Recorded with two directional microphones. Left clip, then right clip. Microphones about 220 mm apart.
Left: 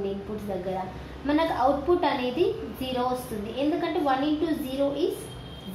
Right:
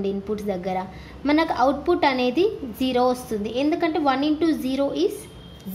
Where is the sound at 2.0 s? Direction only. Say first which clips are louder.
Right 5 dB; 50° right (ahead or behind).